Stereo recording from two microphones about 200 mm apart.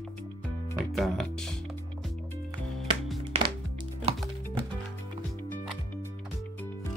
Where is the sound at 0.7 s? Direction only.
Centre (ahead or behind).